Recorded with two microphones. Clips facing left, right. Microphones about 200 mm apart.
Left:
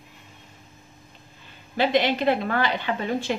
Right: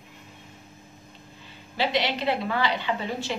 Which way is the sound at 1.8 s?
50° left (ahead or behind).